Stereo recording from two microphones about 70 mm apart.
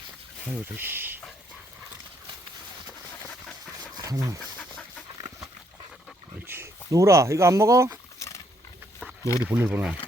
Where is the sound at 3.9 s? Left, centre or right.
Right.